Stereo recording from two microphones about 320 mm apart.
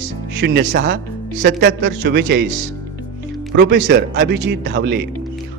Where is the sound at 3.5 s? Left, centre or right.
Right.